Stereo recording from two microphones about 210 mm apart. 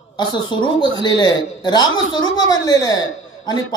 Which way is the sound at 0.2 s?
20° left (ahead or behind).